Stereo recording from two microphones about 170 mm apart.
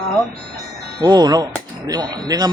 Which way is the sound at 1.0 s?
25° right (ahead or behind).